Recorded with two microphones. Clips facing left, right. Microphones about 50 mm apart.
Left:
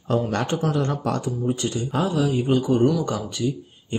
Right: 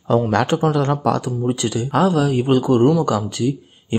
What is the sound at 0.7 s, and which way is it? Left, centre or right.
Speech, right.